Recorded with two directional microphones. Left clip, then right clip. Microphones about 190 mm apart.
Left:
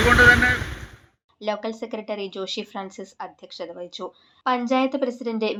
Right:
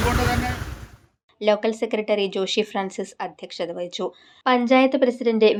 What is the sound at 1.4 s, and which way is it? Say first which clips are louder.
Speech: right 7 dB; 30° right (ahead or behind).